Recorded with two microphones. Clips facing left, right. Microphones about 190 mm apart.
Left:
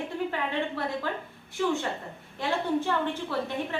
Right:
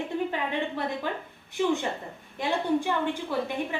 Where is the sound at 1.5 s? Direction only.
15° right (ahead or behind).